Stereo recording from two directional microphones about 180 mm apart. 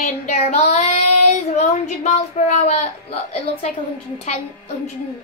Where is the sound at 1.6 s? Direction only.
40° left (ahead or behind).